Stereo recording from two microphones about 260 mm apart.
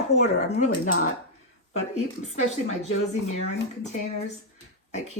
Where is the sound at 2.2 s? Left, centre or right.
Left.